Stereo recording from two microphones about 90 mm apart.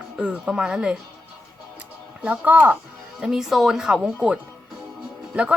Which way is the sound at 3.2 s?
5° right (ahead or behind).